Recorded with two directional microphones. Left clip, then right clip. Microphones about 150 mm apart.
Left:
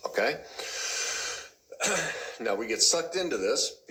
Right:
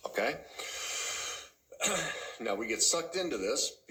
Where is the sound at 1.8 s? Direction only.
25° left (ahead or behind).